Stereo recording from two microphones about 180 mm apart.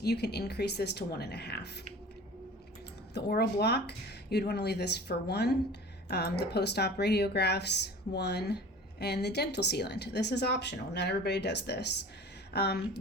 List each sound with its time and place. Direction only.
0.0 s speech: 65° left (ahead or behind)
3.2 s speech: 65° left (ahead or behind)